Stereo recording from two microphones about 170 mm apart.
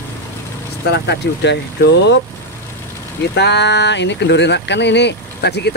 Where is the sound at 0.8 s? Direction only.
75° left (ahead or behind).